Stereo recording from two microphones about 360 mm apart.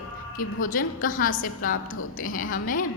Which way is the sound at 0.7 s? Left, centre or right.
Left.